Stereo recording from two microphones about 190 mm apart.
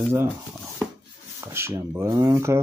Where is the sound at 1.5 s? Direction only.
10° right (ahead or behind).